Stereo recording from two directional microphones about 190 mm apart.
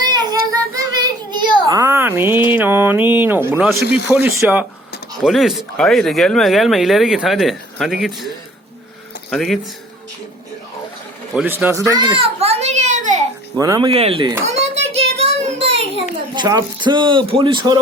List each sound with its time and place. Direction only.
0.0 s child singing: 20° right (ahead or behind)
2.5 s speech: 10° right (ahead or behind)
9.3 s speech: centre (ahead or behind)
11.3 s speech: 10° right (ahead or behind)
11.9 s a sound: 20° right (ahead or behind); by 13.2 s 40° right (ahead or behind)
13.6 s a man's voice: 20° right (ahead or behind)
14.4 s child singing: 35° right (ahead or behind)
16.3 s a man's voice: 20° right (ahead or behind)